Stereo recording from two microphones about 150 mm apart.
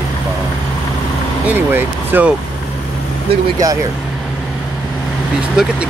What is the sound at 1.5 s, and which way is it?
Speech, 15° right (ahead or behind).